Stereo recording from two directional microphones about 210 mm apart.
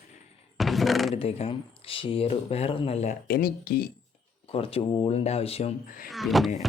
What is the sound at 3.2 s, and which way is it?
Speech, 45° left (ahead or behind).